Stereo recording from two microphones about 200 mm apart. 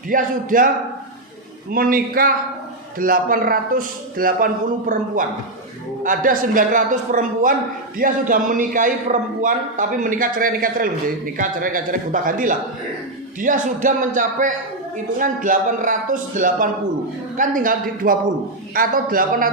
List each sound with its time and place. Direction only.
0.1 s a man's voice: 45° right (ahead or behind)
1.7 s a man's voice: 45° right (ahead or behind)
6.0 s a man's voice: 40° right (ahead or behind)